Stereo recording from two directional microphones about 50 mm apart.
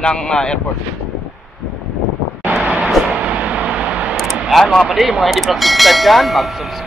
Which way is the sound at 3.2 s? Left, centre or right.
Right.